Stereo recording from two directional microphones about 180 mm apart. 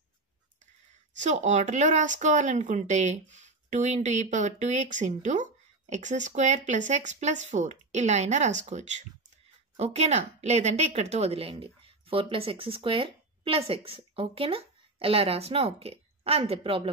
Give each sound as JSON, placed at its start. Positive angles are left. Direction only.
{"t": 1.1, "sound": "speech", "side_deg": -40}